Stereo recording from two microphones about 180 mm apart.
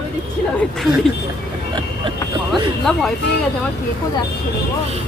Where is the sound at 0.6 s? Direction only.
Centre (ahead or behind).